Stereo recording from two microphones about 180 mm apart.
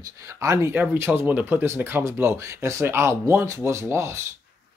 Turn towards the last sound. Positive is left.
turn(degrees=-15)  # may be behind; listen again after turning